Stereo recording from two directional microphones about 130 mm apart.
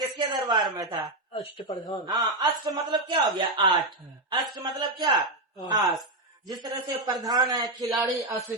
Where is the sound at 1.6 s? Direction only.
30° left (ahead or behind).